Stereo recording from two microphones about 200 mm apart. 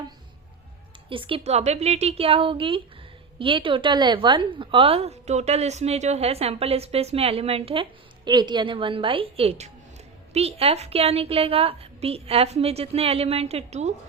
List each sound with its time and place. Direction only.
1.1 s a woman's voice: 25° right (ahead or behind)